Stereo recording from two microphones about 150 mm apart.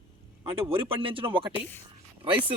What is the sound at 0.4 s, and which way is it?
Speech, 40° right (ahead or behind).